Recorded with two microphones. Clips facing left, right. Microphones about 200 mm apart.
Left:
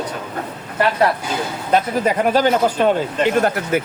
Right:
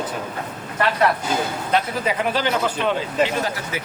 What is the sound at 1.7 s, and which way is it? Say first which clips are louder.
Speech: left 6 dB; 45° left (ahead or behind).